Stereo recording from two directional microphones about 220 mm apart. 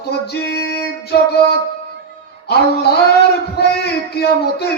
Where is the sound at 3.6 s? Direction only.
50° left (ahead or behind).